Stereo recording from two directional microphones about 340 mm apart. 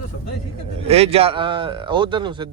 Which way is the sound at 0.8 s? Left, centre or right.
Centre.